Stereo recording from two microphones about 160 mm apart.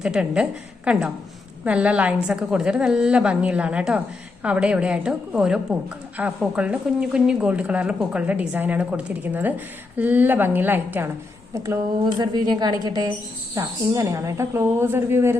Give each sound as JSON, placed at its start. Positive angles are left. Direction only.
{"t": 0.0, "sound": "a woman's voice", "side_deg": -5}